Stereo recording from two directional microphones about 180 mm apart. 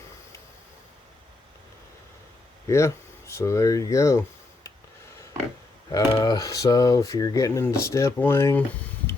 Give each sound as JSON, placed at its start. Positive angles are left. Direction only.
{"t": 2.6, "sound": "speech", "side_deg": 15}
{"t": 5.9, "sound": "speech", "side_deg": 20}